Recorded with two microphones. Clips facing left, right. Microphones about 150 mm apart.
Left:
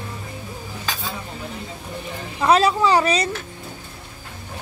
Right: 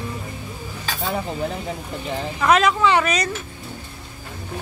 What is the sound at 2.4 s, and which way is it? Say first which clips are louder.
Speech: left 1 dB; 30° left (ahead or behind).